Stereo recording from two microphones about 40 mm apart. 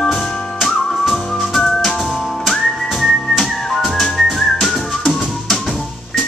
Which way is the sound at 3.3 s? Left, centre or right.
Centre.